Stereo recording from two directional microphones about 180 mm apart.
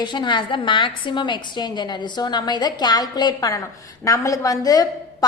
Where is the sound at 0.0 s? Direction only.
25° left (ahead or behind).